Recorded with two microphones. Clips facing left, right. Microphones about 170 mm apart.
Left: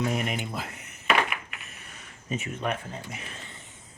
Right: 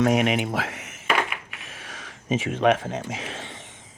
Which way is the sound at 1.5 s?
90° right.